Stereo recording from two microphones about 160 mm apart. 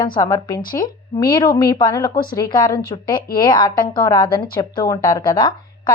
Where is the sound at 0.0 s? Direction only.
25° left (ahead or behind).